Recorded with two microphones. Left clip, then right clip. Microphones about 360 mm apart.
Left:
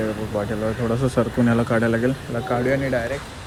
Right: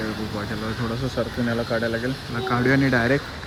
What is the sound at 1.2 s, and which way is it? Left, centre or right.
Speech, left.